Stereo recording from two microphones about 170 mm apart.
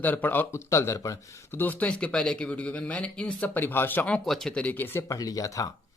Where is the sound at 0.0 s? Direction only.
10° left (ahead or behind).